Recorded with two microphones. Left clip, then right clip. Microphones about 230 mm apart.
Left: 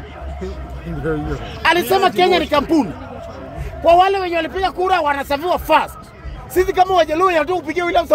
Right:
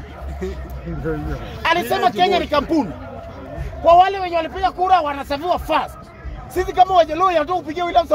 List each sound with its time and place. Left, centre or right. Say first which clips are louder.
1.0 s a man's voice: left 4 dB; left
1.6 s a man's voice: left 3 dB; left